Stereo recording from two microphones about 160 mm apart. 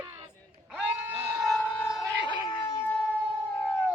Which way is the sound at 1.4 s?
Centre (ahead or behind).